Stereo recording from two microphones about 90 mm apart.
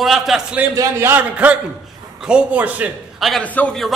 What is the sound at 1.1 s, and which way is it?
A man's voice, 20° right (ahead or behind).